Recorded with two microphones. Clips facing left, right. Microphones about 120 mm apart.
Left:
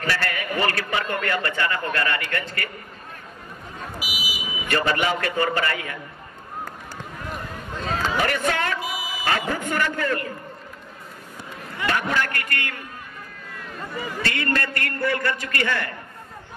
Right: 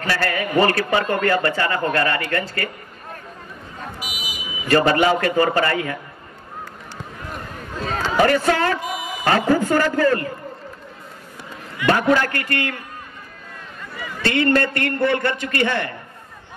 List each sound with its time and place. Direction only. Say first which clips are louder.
0.0 s a man's voice: right 4 dB; 35° right (ahead or behind)
4.0 s vehicle: left 1 dB; 5° left (ahead or behind)
4.6 s a man's voice: right 7 dB; 35° right (ahead or behind)
7.8 s speech: right 6 dB; 35° right (ahead or behind)
8.8 s a sound: right 3 dB; 5° left (ahead or behind)
9.1 s a man's voice: right 8 dB; 40° right (ahead or behind)
11.9 s a man's voice: right 8 dB; 35° right (ahead or behind)
14.2 s a man's voice: right 9 dB; 25° right (ahead or behind)